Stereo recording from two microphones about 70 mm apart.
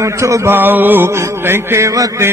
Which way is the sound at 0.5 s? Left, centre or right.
Right.